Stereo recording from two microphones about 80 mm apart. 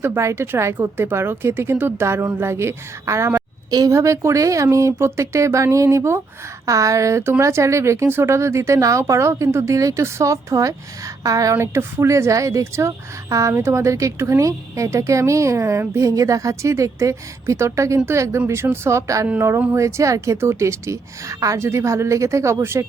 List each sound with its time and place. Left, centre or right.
0.0 s a woman's voice: right
3.7 s a woman's voice: right
3.9 s a woman's voice: right
11.5 s a woman's voice: right